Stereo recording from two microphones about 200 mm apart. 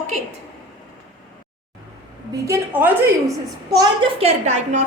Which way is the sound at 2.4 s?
10° right (ahead or behind).